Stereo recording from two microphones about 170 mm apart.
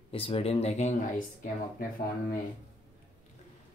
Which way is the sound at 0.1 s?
35° left (ahead or behind).